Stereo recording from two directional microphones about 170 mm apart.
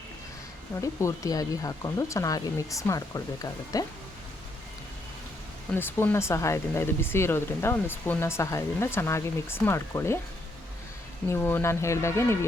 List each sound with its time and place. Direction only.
0.8 s speech: 20° left (ahead or behind)
5.7 s speech: 10° left (ahead or behind)
11.3 s speech: 10° left (ahead or behind)